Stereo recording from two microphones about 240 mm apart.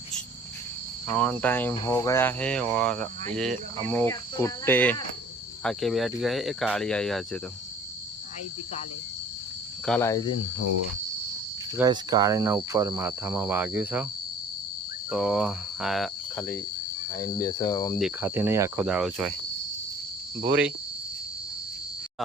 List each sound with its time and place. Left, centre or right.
1.1 s cricket: centre
5.6 s speech: centre
9.8 s cricket: centre
11.8 s speech: centre
15.1 s speech: centre
17.2 s cricket: centre
17.9 s speech: centre